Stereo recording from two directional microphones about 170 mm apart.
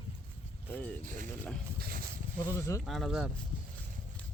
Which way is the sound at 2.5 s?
20° left (ahead or behind).